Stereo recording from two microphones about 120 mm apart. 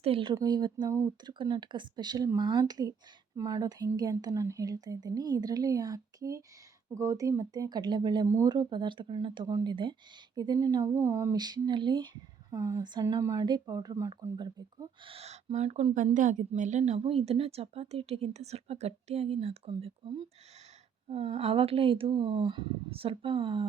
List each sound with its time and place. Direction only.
0.0 s speech: 50° right (ahead or behind)
0.3 s a woman's voice: 35° right (ahead or behind)
9.5 s a woman's voice: 30° right (ahead or behind)
11.3 s a woman's voice: 35° right (ahead or behind)
21.1 s speech: 55° right (ahead or behind)